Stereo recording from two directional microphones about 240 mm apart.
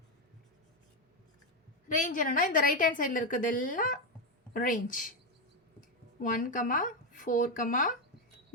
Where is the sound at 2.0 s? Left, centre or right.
Left.